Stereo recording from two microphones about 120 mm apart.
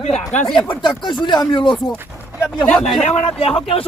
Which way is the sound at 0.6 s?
40° left (ahead or behind).